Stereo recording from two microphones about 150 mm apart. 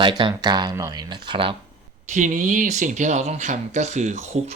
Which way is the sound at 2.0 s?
55° right (ahead or behind).